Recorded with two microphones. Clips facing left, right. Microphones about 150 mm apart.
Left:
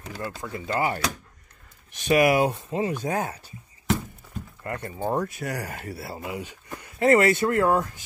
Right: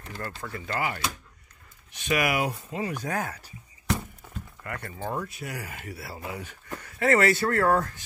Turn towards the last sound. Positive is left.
turn(degrees=15)  # may be behind; listen again after turning